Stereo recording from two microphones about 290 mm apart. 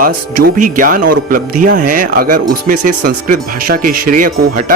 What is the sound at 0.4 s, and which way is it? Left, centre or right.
Speech, right.